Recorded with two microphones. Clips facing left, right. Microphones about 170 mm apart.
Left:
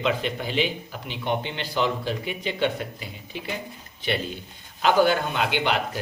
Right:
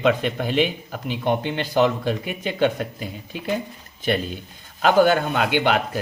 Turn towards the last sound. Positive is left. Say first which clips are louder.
# right 4 dB
turn(degrees=-50)  # may be behind; listen again after turning